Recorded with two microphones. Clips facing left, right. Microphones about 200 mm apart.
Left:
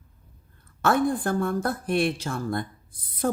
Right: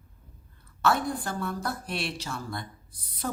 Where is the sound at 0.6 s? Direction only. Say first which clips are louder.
Left 4 dB; 50° left (ahead or behind).